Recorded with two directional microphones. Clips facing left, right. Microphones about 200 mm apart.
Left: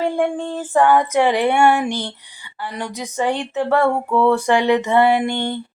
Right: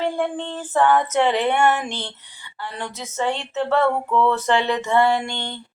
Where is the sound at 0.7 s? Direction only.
10° left (ahead or behind).